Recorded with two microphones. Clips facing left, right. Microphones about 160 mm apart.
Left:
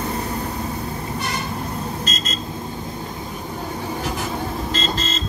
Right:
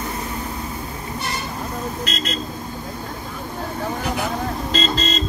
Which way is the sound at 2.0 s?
65° right (ahead or behind).